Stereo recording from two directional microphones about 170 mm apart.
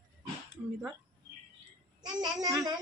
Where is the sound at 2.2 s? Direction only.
20° right (ahead or behind).